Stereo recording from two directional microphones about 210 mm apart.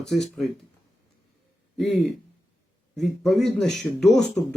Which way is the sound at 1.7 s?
Centre (ahead or behind).